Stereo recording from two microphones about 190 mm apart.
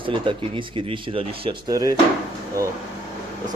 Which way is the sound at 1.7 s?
20° right (ahead or behind).